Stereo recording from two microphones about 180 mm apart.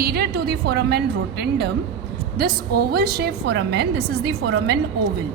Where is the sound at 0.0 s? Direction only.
60° right (ahead or behind).